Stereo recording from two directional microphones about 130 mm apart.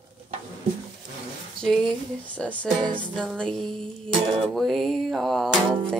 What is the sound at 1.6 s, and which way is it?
Speech, 5° left (ahead or behind).